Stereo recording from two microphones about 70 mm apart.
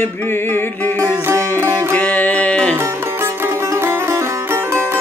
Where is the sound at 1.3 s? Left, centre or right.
Right.